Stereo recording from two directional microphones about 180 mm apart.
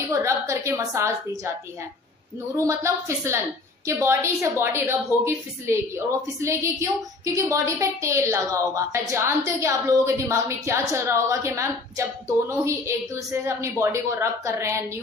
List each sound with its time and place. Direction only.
0.1 s a woman's voice: 15° right (ahead or behind)
2.5 s a woman's voice: 15° right (ahead or behind)